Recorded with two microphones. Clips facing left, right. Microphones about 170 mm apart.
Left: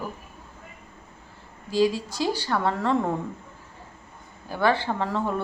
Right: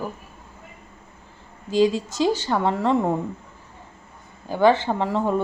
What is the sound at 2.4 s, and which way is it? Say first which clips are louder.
Speech: right 3 dB; 20° right (ahead or behind).